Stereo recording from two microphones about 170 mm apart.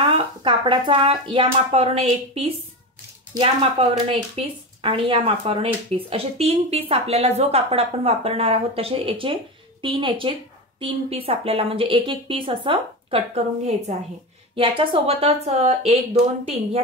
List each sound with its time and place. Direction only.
0.0 s speech: 30° right (ahead or behind)
4.1 s speech: 35° right (ahead or behind)